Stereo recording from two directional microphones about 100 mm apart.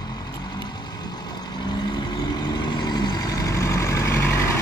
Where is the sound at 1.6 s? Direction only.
45° left (ahead or behind).